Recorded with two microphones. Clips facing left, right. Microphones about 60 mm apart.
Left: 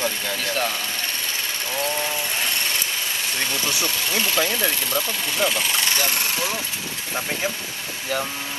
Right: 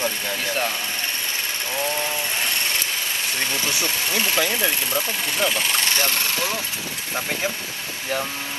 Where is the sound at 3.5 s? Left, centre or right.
Right.